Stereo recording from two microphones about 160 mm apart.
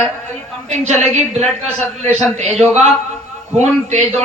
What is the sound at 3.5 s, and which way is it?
Speech, 45° right (ahead or behind).